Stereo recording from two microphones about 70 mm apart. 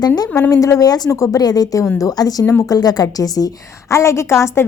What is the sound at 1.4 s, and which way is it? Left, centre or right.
A woman's voice, left.